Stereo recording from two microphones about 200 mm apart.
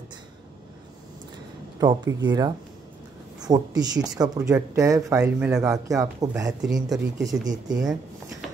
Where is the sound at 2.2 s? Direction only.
20° right (ahead or behind).